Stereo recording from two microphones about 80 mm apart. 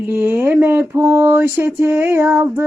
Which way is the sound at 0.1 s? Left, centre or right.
Right.